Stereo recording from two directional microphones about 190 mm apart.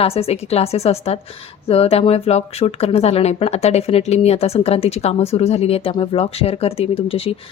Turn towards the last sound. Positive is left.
turn(degrees=30)  # may be behind; listen again after turning